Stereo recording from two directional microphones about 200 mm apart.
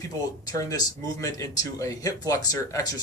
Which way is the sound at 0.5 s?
20° left (ahead or behind).